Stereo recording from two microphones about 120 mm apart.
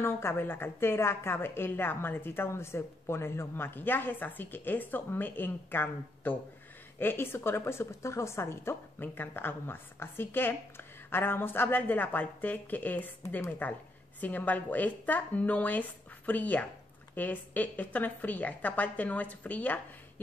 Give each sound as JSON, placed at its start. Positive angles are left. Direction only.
{"t": 0.0, "sound": "a woman's voice", "side_deg": 20}